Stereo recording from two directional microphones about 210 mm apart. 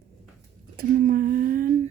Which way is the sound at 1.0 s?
40° right (ahead or behind).